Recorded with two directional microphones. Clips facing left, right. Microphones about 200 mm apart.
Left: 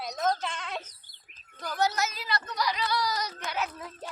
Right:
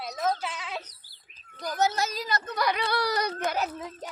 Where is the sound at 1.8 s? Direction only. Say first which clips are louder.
Right 2 dB; 30° right (ahead or behind); by 3.5 s 60° right (ahead or behind).